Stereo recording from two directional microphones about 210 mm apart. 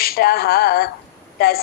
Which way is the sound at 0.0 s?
45° left (ahead or behind).